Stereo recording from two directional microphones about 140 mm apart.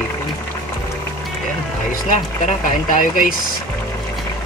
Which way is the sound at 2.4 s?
70° left (ahead or behind).